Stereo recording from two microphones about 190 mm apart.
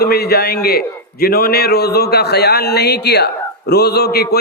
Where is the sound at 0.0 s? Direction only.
55° left (ahead or behind).